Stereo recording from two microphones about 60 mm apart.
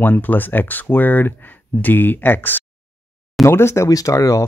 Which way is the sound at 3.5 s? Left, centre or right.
Left.